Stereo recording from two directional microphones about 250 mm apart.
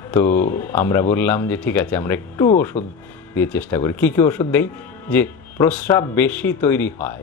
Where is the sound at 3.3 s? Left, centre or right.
Centre.